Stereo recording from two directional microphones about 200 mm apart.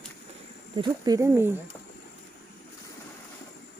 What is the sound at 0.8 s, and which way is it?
Speech, 20° right (ahead or behind).